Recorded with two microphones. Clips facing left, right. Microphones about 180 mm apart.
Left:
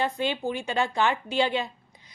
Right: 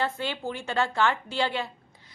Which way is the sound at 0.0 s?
15° left (ahead or behind).